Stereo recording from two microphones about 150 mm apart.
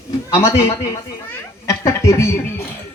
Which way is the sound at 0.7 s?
20° left (ahead or behind).